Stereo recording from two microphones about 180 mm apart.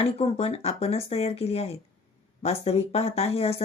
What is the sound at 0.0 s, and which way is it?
Speech, 35° left (ahead or behind).